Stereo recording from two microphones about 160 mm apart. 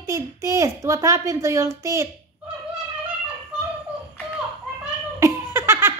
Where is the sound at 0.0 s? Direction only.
15° right (ahead or behind).